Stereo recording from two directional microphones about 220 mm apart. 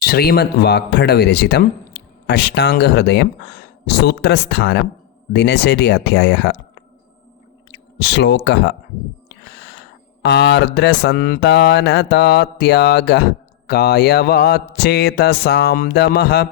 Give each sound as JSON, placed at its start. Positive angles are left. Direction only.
{"t": 0.0, "sound": "speech", "side_deg": 45}
{"t": 7.9, "sound": "speech", "side_deg": 50}
{"t": 10.2, "sound": "speech", "side_deg": 50}